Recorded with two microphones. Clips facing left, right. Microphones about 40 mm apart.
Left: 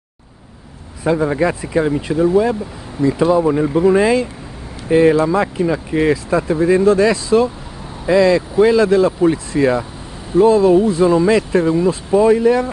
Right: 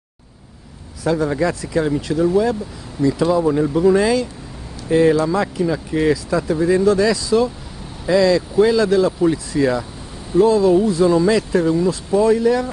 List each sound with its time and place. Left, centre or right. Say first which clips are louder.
1.0 s speech: left 2 dB; left